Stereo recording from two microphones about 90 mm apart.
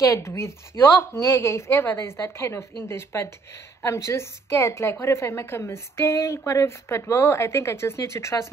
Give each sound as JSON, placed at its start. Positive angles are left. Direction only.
{"t": 0.0, "sound": "a woman's voice", "side_deg": 35}